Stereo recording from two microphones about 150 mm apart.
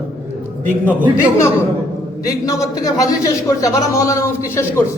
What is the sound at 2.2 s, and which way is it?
A man's voice, 25° left (ahead or behind).